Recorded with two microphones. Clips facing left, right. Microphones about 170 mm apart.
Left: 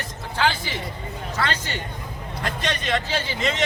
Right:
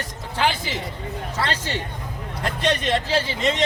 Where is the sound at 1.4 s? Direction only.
30° right (ahead or behind).